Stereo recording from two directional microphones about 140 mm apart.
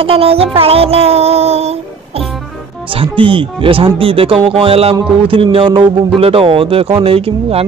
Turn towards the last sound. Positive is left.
turn(degrees=-45)  # may be behind; listen again after turning